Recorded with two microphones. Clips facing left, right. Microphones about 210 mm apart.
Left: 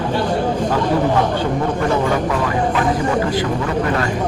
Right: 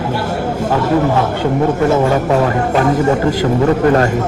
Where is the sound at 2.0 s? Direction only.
45° right (ahead or behind).